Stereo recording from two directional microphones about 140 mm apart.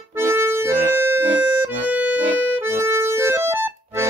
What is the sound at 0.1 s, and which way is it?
Accordion, 20° right (ahead or behind).